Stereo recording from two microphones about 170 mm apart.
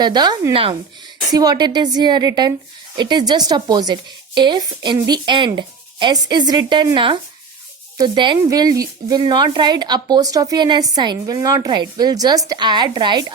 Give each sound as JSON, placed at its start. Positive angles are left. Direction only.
{"t": 0.0, "sound": "speech", "side_deg": -25}